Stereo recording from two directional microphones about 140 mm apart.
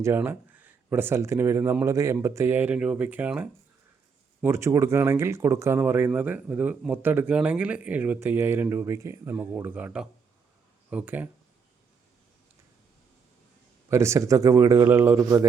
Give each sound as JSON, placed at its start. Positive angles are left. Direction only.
{"t": 0.2, "sound": "speech", "side_deg": -10}
{"t": 13.9, "sound": "a man's voice", "side_deg": -20}